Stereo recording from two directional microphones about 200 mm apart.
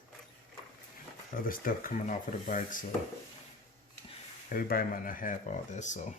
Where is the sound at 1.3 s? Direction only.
45° left (ahead or behind).